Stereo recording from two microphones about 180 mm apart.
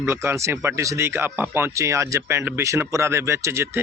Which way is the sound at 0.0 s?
15° right (ahead or behind).